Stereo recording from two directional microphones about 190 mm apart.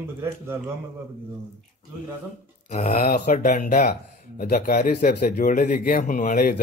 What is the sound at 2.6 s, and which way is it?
Speech, 40° left (ahead or behind).